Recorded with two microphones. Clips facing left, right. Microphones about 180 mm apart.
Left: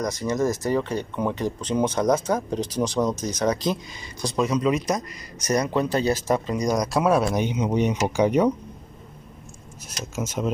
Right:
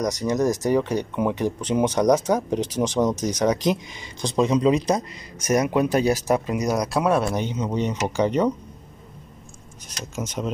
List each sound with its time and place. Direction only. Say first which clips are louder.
0.0 s speech: right 2 dB; 15° right (ahead or behind)
5.6 s speech: right 3 dB; 15° right (ahead or behind)
7.3 s speech: left 2 dB; 15° left (ahead or behind)
9.8 s speech: left 1 dB; 5° left (ahead or behind)